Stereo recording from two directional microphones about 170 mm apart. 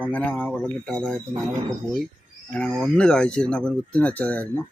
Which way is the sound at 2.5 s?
5° left (ahead or behind).